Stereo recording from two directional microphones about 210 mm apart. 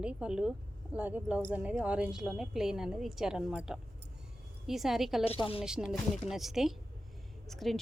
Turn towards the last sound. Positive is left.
turn(degrees=0)  # may be behind; listen again after turning